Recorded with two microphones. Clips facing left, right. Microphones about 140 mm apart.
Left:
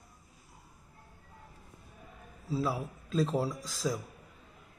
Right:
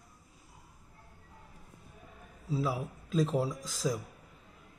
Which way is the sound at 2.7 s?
10° right (ahead or behind).